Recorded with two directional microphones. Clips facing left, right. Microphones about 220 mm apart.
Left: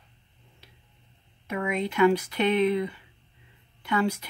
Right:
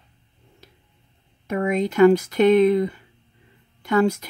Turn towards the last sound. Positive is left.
turn(degrees=-45)  # may be behind; listen again after turning